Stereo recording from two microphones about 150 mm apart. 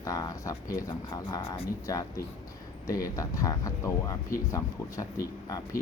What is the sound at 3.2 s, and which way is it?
Speech, 20° left (ahead or behind).